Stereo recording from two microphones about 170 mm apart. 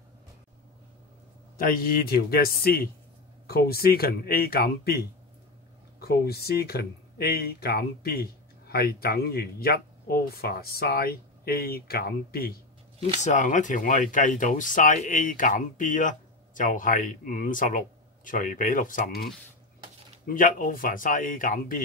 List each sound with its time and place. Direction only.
1.6 s speech: 60° left (ahead or behind)
13.2 s speech: 45° left (ahead or behind)